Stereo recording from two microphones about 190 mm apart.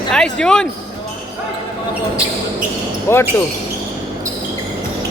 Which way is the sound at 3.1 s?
15° left (ahead or behind).